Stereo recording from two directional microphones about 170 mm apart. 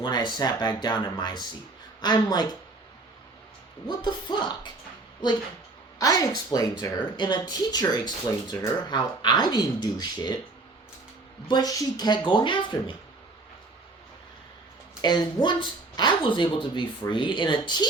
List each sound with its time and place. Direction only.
0.0 s speech: 25° left (ahead or behind)
3.8 s speech: 25° left (ahead or behind)
6.0 s speech: 20° left (ahead or behind)
11.4 s speech: 25° left (ahead or behind)
15.0 s speech: 25° left (ahead or behind)